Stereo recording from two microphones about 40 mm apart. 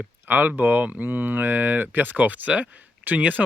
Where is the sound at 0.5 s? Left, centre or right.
Right.